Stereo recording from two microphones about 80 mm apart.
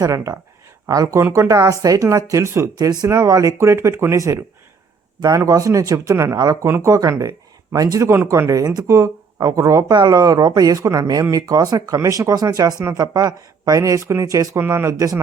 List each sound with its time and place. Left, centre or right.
0.0 s speech: right
2.7 s speech: right
5.5 s speech: right
9.9 s speech: right